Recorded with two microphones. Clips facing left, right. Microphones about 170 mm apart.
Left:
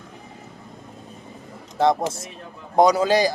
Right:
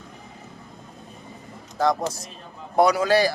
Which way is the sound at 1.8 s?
25° left (ahead or behind).